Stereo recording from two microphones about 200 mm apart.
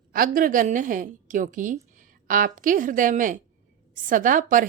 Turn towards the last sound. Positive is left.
turn(degrees=-40)  # may be behind; listen again after turning